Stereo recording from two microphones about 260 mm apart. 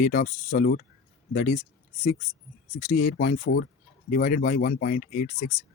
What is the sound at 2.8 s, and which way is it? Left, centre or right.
Speech, left.